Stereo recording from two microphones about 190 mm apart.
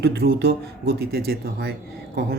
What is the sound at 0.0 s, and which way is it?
A man's voice, 55° right (ahead or behind).